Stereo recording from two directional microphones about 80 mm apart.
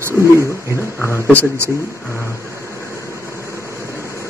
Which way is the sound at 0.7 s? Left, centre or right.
Left.